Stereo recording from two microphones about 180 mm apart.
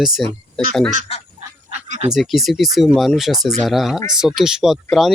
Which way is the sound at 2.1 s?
Centre (ahead or behind).